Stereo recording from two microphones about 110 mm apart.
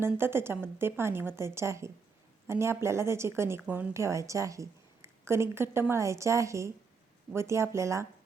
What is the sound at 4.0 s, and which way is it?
Speech, 25° right (ahead or behind).